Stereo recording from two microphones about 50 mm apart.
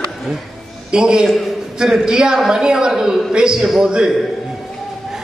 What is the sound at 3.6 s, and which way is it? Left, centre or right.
Speech, centre.